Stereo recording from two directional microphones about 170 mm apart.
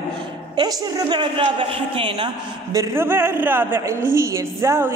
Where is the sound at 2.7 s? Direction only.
15° right (ahead or behind).